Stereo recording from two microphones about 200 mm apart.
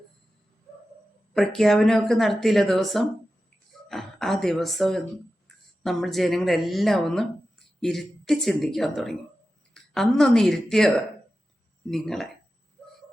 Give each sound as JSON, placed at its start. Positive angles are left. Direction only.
{"t": 1.3, "sound": "speech", "side_deg": 0}